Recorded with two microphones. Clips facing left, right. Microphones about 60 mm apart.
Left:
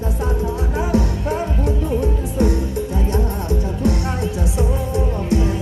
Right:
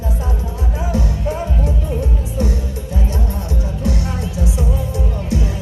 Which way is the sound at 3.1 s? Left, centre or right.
Left.